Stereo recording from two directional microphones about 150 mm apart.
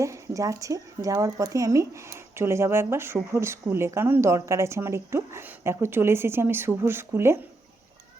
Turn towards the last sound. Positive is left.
turn(degrees=-15)  # may be behind; listen again after turning